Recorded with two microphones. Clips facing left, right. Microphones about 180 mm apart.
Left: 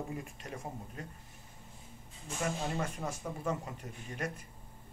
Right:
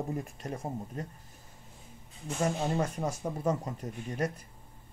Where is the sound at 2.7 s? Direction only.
35° right (ahead or behind).